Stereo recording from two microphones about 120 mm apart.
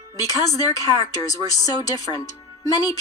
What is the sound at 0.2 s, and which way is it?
A woman's voice, 30° left (ahead or behind).